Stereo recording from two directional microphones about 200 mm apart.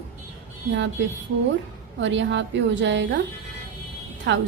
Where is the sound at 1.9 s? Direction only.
65° right (ahead or behind).